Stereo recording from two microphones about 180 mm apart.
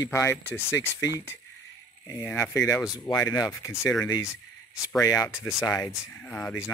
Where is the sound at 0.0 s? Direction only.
15° left (ahead or behind).